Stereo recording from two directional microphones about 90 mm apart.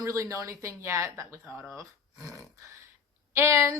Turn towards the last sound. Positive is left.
turn(degrees=-30)  # may be behind; listen again after turning